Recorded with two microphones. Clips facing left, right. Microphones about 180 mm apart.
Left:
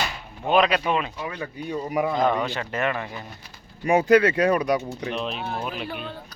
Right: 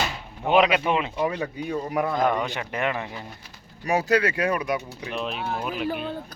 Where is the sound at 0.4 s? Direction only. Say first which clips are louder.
Right 1 dB; 20° right (ahead or behind).